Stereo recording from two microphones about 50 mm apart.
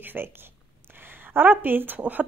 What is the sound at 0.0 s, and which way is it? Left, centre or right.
Speech, right.